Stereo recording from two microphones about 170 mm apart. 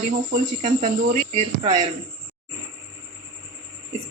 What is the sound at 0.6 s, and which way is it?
Speech, 50° right (ahead or behind).